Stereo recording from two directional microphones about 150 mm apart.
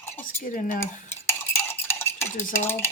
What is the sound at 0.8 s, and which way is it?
Cutlery, 15° left (ahead or behind).